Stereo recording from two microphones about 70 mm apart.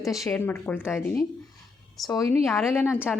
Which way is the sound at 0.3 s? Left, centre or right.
Left.